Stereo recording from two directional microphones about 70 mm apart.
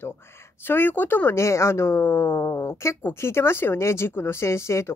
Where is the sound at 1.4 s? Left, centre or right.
Left.